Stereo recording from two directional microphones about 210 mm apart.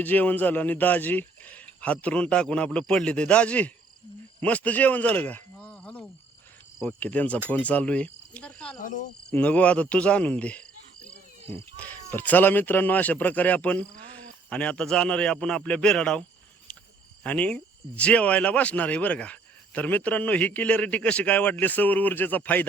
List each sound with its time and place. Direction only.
0.0 s speech: 10° left (ahead or behind)
8.8 s speech: 40° left (ahead or behind)
9.3 s a man's voice: 5° left (ahead or behind)
17.2 s speech: 5° left (ahead or behind)